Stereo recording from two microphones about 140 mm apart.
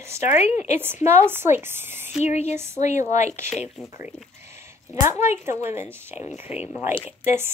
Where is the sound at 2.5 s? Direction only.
20° right (ahead or behind).